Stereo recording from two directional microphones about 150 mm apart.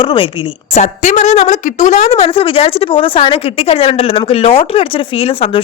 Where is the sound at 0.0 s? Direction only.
35° left (ahead or behind).